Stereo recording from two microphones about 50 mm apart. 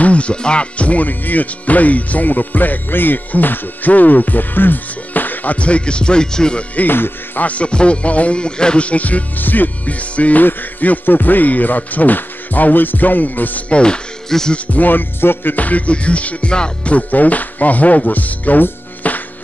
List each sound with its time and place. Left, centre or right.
0.0 s speech: left
6.7 s speech: left
7.4 s music: left
10.4 s speech: left
13.7 s music: centre
14.5 s speech: left
15.5 s speech: left